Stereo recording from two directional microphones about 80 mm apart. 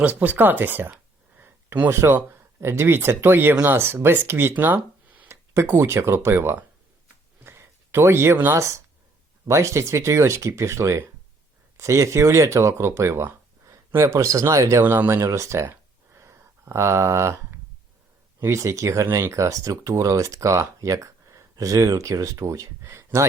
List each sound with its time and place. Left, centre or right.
0.0 s speech: centre
1.4 s a sound: right
2.0 s speech: right
14.8 s speech: right
15.2 s a sound: right
18.3 s speech: right